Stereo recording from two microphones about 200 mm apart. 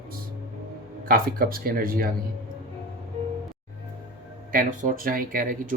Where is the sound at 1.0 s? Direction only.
45° right (ahead or behind).